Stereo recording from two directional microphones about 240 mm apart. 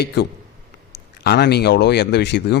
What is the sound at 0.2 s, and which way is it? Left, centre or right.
Speech, left.